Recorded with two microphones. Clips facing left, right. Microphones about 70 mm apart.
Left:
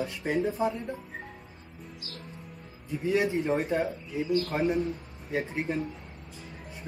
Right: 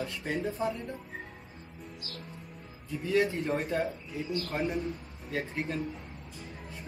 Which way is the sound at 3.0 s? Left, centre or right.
Left.